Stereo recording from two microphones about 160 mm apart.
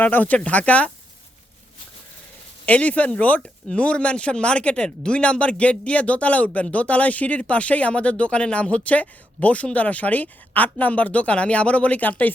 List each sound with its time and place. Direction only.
0.0 s speech: 10° left (ahead or behind)
2.6 s speech: 10° left (ahead or behind)